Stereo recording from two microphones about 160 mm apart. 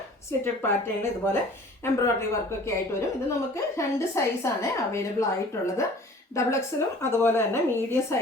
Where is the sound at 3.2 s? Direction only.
20° left (ahead or behind).